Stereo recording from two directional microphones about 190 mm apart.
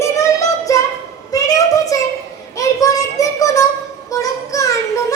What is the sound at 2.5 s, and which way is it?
Child singing, 15° left (ahead or behind).